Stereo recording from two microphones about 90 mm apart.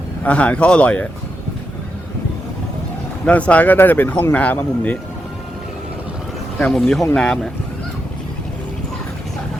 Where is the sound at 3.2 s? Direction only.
15° left (ahead or behind).